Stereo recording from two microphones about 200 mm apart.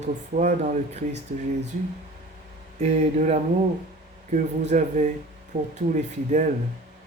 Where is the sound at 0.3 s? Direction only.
40° right (ahead or behind).